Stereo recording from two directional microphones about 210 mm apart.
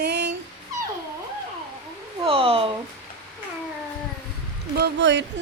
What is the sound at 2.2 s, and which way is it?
Speech, 25° right (ahead or behind).